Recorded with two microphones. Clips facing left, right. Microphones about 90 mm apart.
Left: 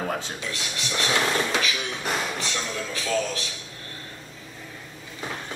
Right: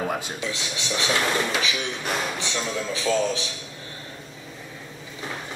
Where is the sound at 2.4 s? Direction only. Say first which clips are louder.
Right 2 dB; 20° right (ahead or behind).